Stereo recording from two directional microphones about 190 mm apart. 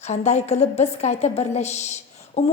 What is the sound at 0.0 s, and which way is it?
A woman's voice, 35° left (ahead or behind).